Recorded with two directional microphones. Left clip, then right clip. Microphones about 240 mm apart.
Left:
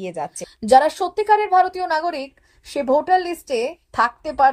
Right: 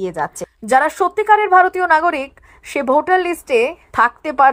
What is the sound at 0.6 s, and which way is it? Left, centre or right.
A woman's voice, right.